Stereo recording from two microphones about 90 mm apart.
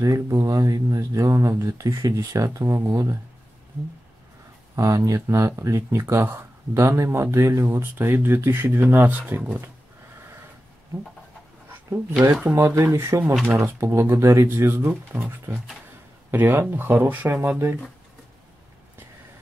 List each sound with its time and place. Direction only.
0.0 s speech: 35° right (ahead or behind)
4.7 s speech: 40° right (ahead or behind); by 9.6 s 15° right (ahead or behind)
12.5 s speech: 30° right (ahead or behind)
13.2 s speech: 5° right (ahead or behind)
13.5 s speech: 30° right (ahead or behind)